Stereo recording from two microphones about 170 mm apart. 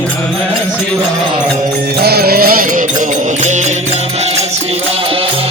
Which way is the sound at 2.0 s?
70° right (ahead or behind).